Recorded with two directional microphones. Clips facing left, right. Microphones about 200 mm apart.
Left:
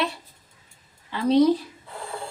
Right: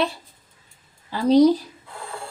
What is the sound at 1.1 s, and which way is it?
Speech, 35° right (ahead or behind).